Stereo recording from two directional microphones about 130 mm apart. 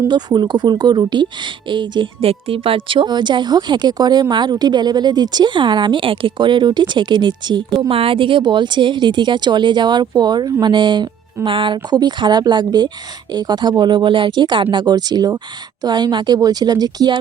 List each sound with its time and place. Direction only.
0.1 s speech: 35° right (ahead or behind)